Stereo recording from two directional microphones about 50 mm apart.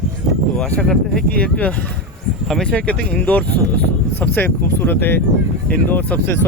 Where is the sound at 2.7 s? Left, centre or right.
Left.